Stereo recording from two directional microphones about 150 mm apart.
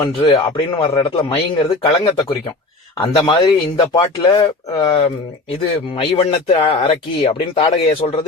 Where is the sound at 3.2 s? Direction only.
35° left (ahead or behind).